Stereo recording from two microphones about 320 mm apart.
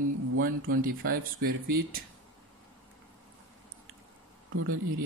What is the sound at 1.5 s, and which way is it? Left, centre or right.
Speech, right.